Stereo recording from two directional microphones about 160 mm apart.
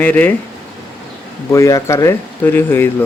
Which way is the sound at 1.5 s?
20° left (ahead or behind).